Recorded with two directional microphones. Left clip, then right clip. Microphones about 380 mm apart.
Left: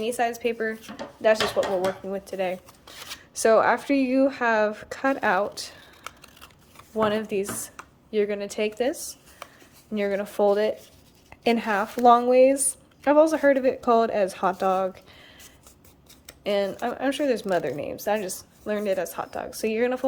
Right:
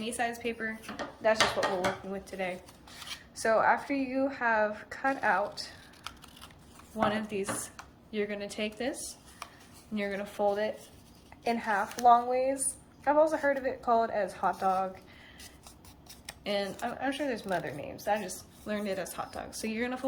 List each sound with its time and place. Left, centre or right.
0.0 s speech: centre
7.0 s speech: centre
16.4 s speech: centre